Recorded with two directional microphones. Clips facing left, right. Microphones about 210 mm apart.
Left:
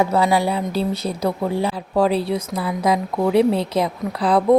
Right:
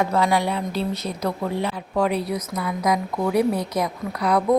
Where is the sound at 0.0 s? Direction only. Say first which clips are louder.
Left 3 dB; 30° left (ahead or behind).